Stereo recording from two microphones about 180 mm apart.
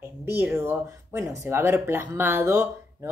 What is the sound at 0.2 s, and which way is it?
Speech, 10° right (ahead or behind).